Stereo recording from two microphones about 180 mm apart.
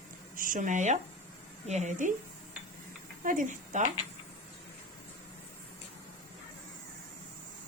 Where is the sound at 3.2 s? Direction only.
45° right (ahead or behind).